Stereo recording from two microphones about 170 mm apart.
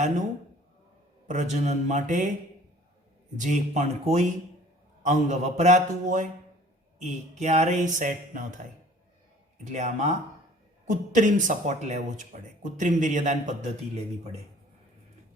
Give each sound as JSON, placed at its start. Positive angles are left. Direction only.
{"t": 1.3, "sound": "speech", "side_deg": -45}
{"t": 3.3, "sound": "speech", "side_deg": -45}
{"t": 9.6, "sound": "speech", "side_deg": -45}